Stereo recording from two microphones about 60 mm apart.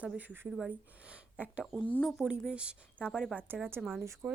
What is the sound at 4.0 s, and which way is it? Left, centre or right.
Speech, right.